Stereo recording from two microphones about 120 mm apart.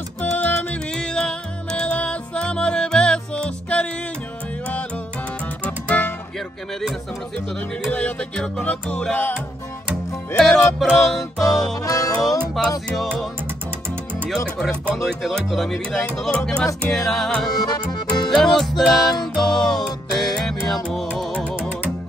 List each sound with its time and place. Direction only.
0.2 s music: 15° left (ahead or behind)
5.6 s music: 15° left (ahead or behind)
7.9 s music: 10° left (ahead or behind)
10.4 s music: 5° left (ahead or behind)
11.8 s music: 30° left (ahead or behind)
12.9 s music: centre (ahead or behind)
14.3 s speech: 5° left (ahead or behind)
17.6 s accordion: 35° left (ahead or behind)
18.3 s music: 5° left (ahead or behind)